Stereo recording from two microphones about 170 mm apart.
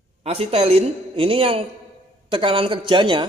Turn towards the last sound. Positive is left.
turn(degrees=-30)  # may be behind; listen again after turning